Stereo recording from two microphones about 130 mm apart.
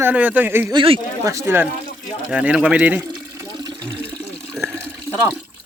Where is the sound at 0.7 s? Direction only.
45° right (ahead or behind).